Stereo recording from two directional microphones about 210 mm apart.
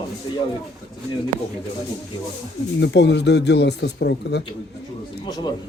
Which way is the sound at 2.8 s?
55° left (ahead or behind).